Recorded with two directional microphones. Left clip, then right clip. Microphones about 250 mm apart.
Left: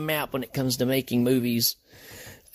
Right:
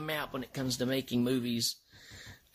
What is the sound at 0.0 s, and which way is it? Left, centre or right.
Speech, left.